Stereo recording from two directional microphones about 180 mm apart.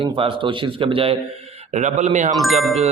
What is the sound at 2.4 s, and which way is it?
Speech, centre (ahead or behind).